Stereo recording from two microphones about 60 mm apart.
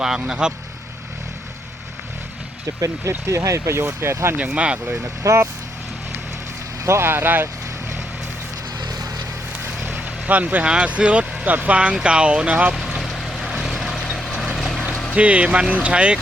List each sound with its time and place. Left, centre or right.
0.0 s speech: centre
2.8 s speech: right
4.4 s speech: right
5.2 s speech: right
6.8 s speech: right
8.9 s vehicle: right
9.8 s speech: right
13.1 s vehicle: centre
15.1 s speech: right